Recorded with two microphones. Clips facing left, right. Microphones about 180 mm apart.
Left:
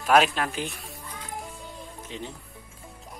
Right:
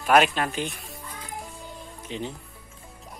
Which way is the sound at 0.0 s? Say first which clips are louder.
Right 1 dB; centre (ahead or behind).